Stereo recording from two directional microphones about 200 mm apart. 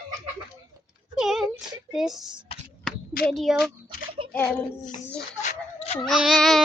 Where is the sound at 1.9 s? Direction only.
Centre (ahead or behind).